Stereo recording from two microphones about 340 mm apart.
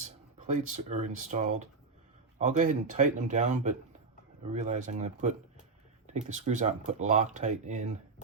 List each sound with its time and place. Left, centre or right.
0.4 s speech: right